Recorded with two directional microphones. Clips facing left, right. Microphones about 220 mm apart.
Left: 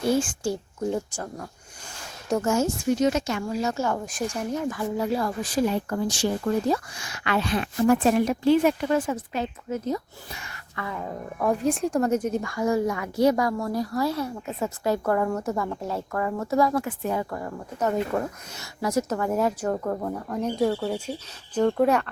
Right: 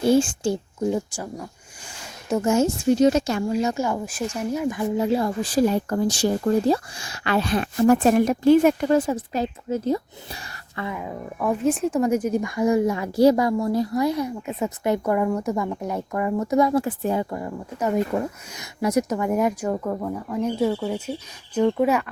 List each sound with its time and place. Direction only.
0.1 s speech: 25° right (ahead or behind)
0.9 s a woman's voice: 10° right (ahead or behind)
2.4 s speech: 20° right (ahead or behind)
3.6 s a woman's voice: 15° right (ahead or behind)
4.8 s speech: 25° right (ahead or behind)
10.9 s a woman's voice: 5° right (ahead or behind)
13.0 s a woman's voice: 30° right (ahead or behind); by 19.7 s 15° right (ahead or behind)
19.7 s a woman's voice: centre (ahead or behind)